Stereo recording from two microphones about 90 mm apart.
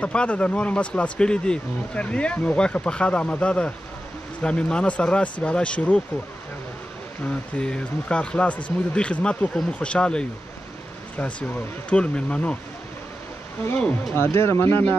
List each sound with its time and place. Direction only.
0.0 s speech: 10° left (ahead or behind)
7.2 s speech: 10° left (ahead or behind)
13.7 s speech: 10° left (ahead or behind)
14.1 s speech: 25° left (ahead or behind)